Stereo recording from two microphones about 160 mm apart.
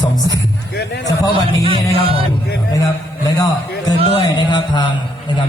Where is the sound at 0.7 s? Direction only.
90° left.